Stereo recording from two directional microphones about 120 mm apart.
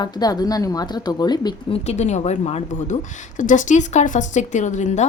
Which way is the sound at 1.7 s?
70° left (ahead or behind).